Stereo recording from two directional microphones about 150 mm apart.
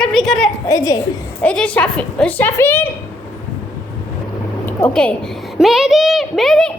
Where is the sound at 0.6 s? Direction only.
20° left (ahead or behind).